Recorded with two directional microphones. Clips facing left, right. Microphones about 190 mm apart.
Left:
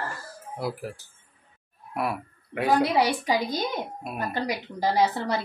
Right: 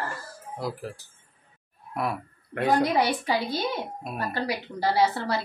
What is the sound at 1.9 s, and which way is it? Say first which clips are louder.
A woman's voice: left 1 dB; 5° left (ahead or behind).